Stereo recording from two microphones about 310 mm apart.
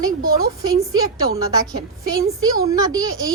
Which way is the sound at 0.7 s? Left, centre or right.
Centre.